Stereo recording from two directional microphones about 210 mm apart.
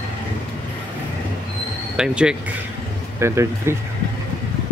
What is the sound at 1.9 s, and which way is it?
Speech, 5° right (ahead or behind).